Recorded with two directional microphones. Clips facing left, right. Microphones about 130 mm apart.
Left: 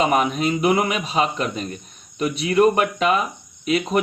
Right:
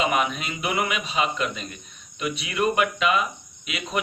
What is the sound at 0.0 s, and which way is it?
Speech, 40° left (ahead or behind).